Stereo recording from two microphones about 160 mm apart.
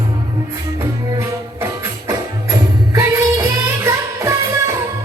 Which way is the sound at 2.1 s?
20° right (ahead or behind).